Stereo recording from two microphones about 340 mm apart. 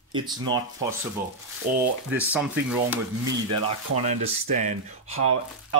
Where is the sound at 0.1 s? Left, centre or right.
Centre.